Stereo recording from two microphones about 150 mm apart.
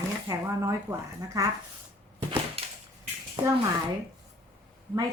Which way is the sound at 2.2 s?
35° right (ahead or behind).